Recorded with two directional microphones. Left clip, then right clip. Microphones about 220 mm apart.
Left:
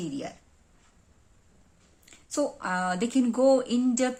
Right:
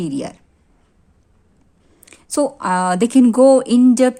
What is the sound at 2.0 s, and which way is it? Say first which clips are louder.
A woman's voice: right 10 dB; 55° right (ahead or behind).